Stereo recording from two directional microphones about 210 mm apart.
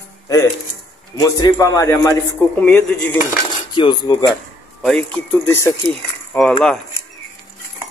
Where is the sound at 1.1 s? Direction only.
20° left (ahead or behind).